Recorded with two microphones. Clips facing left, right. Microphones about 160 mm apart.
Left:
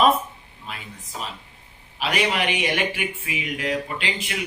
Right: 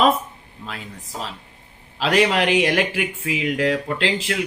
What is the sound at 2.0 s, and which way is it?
Speech, 90° right.